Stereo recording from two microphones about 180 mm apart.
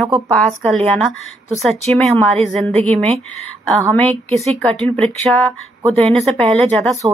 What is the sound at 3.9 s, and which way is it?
Speech, 10° left (ahead or behind).